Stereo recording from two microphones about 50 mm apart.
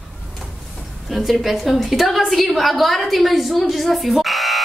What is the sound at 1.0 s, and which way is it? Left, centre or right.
A woman's voice, centre.